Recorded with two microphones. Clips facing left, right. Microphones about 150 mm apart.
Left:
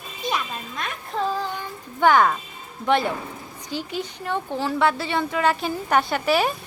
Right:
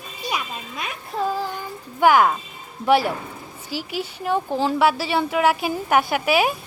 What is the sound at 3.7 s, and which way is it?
Speech, 25° left (ahead or behind).